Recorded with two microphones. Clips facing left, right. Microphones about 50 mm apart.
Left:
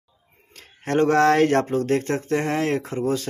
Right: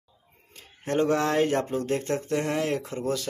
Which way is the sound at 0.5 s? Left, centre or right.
Left.